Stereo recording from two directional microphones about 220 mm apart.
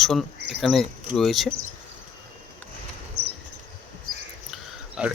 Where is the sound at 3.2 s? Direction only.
50° right (ahead or behind).